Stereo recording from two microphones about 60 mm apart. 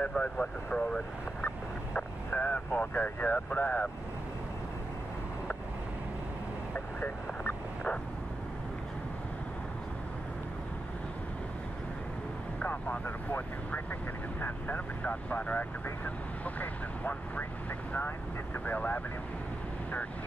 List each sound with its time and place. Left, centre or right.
0.0 s speech: left
6.7 s vehicle: left
12.5 s speech: left
18.7 s speech: left